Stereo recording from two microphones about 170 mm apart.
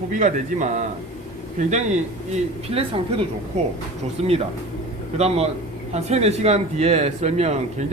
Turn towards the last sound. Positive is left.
turn(degrees=-40)  # may be behind; listen again after turning